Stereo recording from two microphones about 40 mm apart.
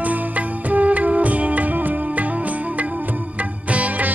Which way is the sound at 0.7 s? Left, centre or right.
Right.